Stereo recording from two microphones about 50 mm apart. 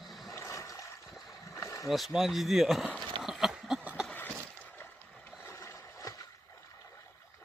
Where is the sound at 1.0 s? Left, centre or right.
Centre.